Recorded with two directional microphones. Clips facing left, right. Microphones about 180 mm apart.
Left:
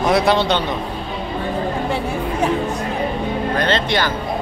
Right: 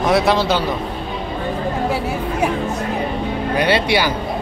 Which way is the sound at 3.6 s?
10° right (ahead or behind).